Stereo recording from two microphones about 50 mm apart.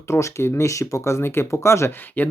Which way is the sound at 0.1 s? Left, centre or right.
Left.